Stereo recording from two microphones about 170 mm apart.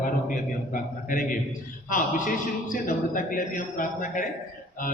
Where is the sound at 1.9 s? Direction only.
50° left (ahead or behind).